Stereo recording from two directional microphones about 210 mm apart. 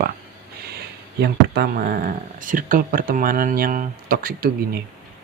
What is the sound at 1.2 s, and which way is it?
Speech, 50° right (ahead or behind).